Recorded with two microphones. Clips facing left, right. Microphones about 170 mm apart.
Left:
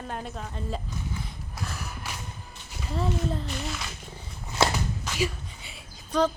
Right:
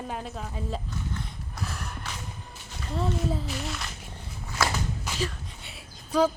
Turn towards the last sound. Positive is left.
turn(degrees=-5)  # may be behind; listen again after turning